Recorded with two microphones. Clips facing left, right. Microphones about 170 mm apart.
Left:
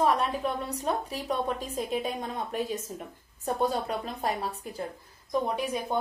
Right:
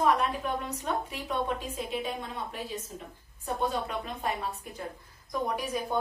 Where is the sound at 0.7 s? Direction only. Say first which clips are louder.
Left 2 dB; 35° left (ahead or behind).